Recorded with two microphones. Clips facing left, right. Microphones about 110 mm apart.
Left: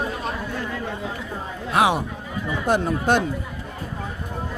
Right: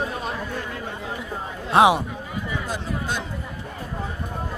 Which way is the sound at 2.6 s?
55° left (ahead or behind).